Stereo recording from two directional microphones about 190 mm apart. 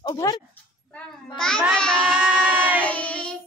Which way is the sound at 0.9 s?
5° left (ahead or behind).